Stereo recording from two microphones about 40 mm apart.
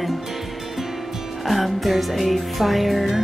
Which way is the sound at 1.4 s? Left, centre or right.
Centre.